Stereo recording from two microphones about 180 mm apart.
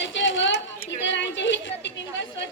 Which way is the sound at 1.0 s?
85° left.